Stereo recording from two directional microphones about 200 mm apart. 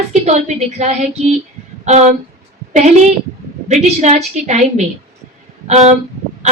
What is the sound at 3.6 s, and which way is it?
A woman's voice, 35° right (ahead or behind).